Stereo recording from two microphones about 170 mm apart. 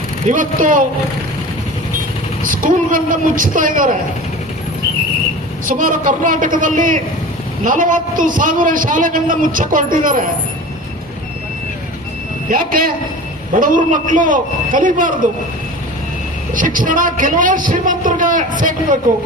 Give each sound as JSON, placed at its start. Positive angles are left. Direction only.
{"t": 0.3, "sound": "a man's voice", "side_deg": -50}
{"t": 2.4, "sound": "a man's voice", "side_deg": -50}
{"t": 5.6, "sound": "a man's voice", "side_deg": -55}
{"t": 12.5, "sound": "a man's voice", "side_deg": -55}
{"t": 16.6, "sound": "a man's voice", "side_deg": -50}